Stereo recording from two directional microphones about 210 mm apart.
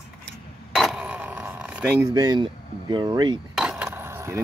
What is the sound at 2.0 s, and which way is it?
Speech, 20° right (ahead or behind).